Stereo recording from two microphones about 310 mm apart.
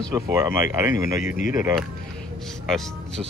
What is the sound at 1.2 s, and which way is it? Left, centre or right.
Speech, left.